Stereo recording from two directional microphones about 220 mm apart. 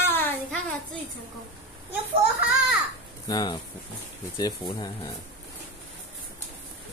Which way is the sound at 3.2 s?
20° left (ahead or behind).